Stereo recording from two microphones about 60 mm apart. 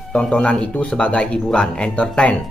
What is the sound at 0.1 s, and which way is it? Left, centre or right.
Speech, centre.